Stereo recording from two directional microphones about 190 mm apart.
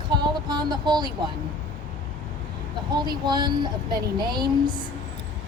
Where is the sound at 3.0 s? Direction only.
20° right (ahead or behind).